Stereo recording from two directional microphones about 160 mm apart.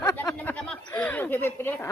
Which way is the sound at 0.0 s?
20° left (ahead or behind).